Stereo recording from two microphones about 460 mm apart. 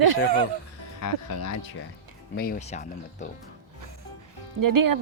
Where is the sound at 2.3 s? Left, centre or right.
Centre.